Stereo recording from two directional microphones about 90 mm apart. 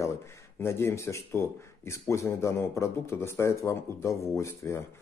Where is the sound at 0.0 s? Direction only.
30° left (ahead or behind).